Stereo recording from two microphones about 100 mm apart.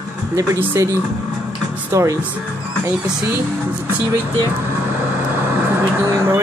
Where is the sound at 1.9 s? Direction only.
30° right (ahead or behind).